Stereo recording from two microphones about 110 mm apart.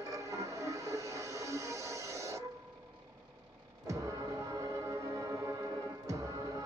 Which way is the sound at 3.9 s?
30° right (ahead or behind).